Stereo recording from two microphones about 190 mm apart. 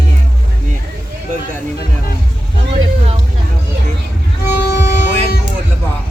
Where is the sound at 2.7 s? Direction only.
30° right (ahead or behind).